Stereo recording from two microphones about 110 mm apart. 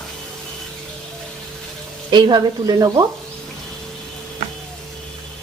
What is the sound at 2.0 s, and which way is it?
A woman's voice, 40° right (ahead or behind).